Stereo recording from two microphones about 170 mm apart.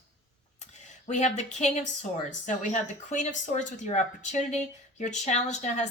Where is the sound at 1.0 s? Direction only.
45° left (ahead or behind).